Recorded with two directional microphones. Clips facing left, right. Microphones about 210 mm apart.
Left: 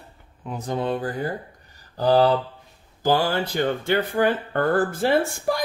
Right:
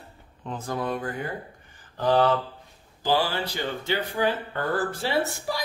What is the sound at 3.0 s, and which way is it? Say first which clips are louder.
Speech: left 4 dB; 45° left (ahead or behind).